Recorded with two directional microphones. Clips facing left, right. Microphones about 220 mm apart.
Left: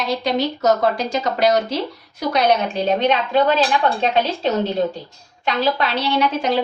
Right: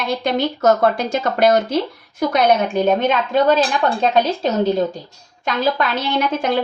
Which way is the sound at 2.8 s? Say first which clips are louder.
Right 1 dB; 45° right (ahead or behind).